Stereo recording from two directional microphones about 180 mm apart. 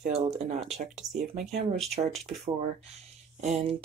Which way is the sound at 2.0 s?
25° right (ahead or behind).